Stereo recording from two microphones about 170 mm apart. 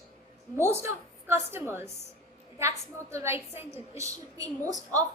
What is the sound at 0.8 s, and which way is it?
A woman's voice, 15° right (ahead or behind).